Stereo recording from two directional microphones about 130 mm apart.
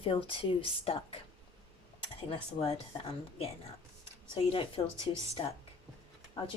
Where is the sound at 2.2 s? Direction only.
50° left (ahead or behind).